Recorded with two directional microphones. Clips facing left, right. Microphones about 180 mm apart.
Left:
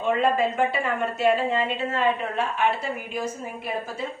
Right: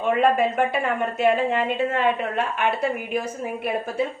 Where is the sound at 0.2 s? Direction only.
60° right (ahead or behind).